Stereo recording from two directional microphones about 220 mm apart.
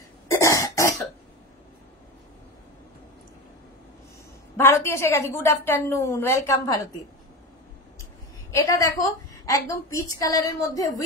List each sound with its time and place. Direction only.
0.3 s cough: 15° left (ahead or behind)
4.6 s a woman's voice: 10° left (ahead or behind)
8.5 s a woman's voice: 15° left (ahead or behind)